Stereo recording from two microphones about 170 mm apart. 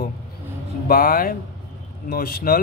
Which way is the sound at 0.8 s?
55° left (ahead or behind).